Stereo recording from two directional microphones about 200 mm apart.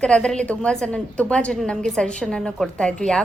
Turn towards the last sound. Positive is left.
turn(degrees=5)  # may be behind; listen again after turning